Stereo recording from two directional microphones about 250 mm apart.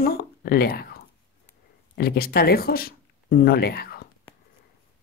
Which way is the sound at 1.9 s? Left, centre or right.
Left.